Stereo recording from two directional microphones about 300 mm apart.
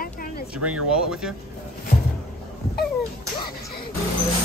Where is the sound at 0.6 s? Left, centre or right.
Right.